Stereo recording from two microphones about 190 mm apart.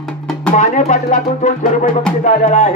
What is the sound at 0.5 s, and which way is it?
Speech, 40° left (ahead or behind).